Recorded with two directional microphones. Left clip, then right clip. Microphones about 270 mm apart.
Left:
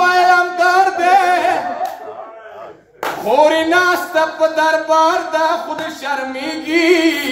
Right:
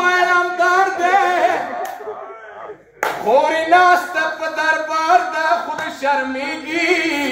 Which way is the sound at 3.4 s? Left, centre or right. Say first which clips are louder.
Left 2 dB; left.